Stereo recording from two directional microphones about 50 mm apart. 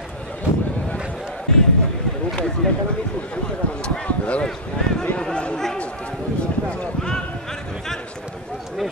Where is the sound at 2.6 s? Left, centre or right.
Centre.